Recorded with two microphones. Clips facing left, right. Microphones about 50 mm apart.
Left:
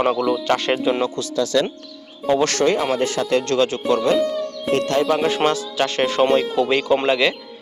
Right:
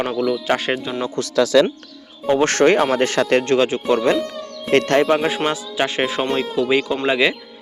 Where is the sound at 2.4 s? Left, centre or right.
Right.